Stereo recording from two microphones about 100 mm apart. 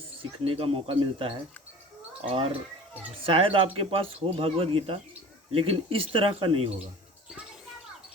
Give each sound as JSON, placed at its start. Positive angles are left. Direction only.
{"t": 0.2, "sound": "speech", "side_deg": -65}
{"t": 2.5, "sound": "speech", "side_deg": -15}
{"t": 3.2, "sound": "speech", "side_deg": -70}